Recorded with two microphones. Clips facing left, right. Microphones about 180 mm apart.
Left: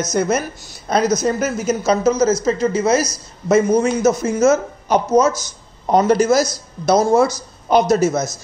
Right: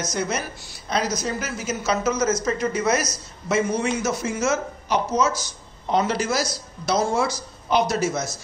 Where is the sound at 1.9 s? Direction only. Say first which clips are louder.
Left 6 dB; 35° left (ahead or behind).